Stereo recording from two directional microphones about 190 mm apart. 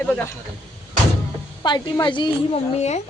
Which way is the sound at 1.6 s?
20° left (ahead or behind).